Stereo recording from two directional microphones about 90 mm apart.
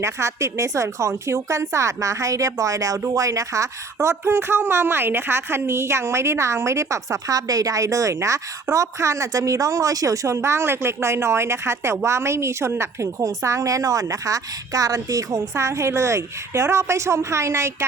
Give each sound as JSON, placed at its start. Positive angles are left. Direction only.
{"t": 0.0, "sound": "a woman's voice", "side_deg": -35}